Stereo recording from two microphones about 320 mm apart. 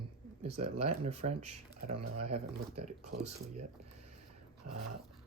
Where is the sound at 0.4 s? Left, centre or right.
Centre.